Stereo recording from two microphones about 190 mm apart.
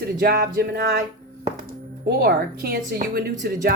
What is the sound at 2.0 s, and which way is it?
A woman's voice, 55° right (ahead or behind).